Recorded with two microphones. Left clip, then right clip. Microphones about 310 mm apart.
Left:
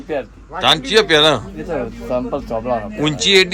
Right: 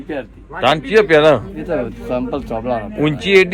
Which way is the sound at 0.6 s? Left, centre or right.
Centre.